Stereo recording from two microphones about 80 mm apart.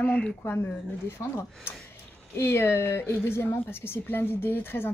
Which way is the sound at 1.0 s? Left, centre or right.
Left.